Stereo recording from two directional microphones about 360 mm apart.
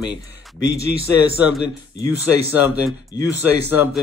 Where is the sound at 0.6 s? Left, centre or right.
Left.